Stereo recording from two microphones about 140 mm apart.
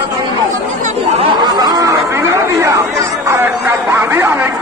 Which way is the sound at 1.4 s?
30° right (ahead or behind).